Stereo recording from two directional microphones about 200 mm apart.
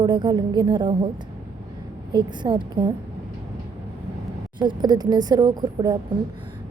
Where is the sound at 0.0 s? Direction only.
20° right (ahead or behind).